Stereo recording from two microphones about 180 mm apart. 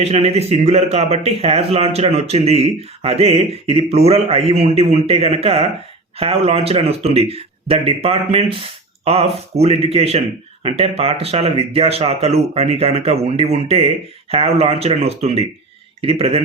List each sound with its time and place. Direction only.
0.0 s speech: 35° right (ahead or behind)